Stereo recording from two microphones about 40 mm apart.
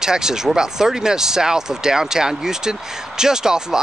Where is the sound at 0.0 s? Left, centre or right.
Centre.